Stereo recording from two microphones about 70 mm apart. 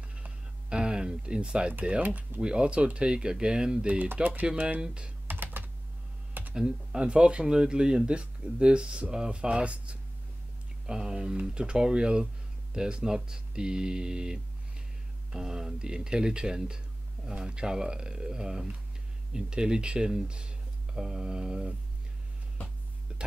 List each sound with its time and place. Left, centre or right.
0.1 s a sound: centre
1.9 s speech: right
5.3 s computer keyboard: right
6.5 s speech: centre